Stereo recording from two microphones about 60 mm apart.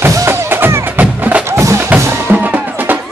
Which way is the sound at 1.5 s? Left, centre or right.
Right.